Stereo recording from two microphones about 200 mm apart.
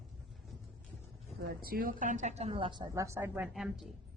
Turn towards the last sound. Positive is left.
turn(degrees=0)  # may be behind; listen again after turning